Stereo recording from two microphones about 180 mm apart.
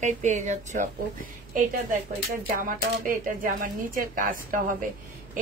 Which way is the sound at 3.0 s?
50° right (ahead or behind).